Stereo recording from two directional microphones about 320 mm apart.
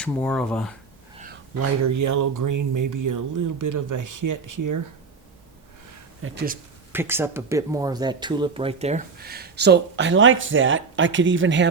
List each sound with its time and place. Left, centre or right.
0.0 s speech: centre
1.6 s speech: right
6.2 s speech: right
6.9 s speech: centre; by 11.7 s right